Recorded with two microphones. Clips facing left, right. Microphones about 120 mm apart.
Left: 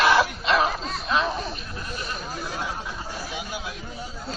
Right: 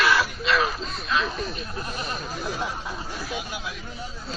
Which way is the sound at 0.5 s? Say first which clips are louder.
Left 2 dB; 25° left (ahead or behind).